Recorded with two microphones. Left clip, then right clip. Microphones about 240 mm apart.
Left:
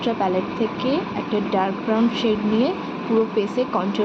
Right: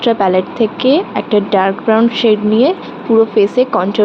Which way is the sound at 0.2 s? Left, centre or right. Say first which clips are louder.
Right 9 dB; right.